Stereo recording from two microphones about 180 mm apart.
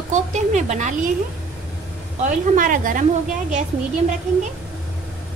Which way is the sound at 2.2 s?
45° right (ahead or behind).